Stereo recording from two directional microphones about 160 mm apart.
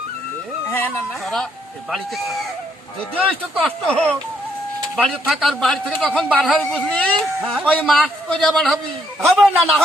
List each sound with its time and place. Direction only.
0.7 s speech: 15° left (ahead or behind)
1.2 s a man's voice: centre (ahead or behind)